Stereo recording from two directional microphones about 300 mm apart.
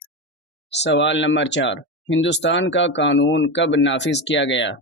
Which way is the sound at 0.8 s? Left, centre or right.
Left.